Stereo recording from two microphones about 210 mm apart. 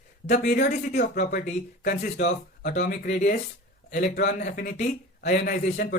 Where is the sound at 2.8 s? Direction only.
35° left (ahead or behind).